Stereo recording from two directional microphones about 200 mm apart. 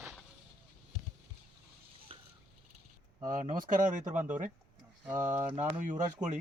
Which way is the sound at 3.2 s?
40° right (ahead or behind).